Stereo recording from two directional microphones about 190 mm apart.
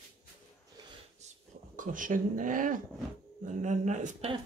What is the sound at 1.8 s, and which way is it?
Speech, 45° right (ahead or behind).